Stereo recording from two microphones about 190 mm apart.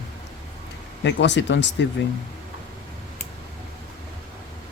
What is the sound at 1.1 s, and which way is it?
Speech, 70° left (ahead or behind).